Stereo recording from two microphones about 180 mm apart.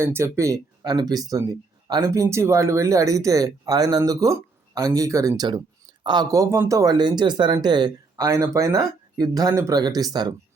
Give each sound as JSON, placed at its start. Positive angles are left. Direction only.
{"t": 0.0, "sound": "speech", "side_deg": -15}